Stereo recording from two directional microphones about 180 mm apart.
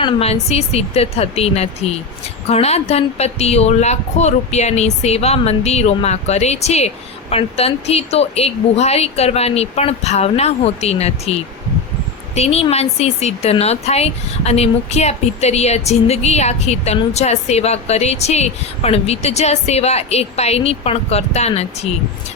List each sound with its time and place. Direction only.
0.0 s a woman's voice: 35° left (ahead or behind)